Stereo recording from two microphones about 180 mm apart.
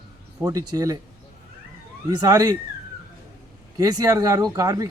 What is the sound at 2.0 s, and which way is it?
Speech, 20° right (ahead or behind).